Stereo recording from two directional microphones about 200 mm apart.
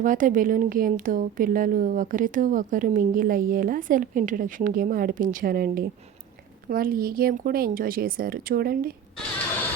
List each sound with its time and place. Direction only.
0.0 s a woman's voice: 40° right (ahead or behind)